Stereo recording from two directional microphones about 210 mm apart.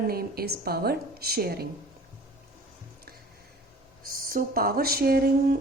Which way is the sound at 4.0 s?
45° right (ahead or behind).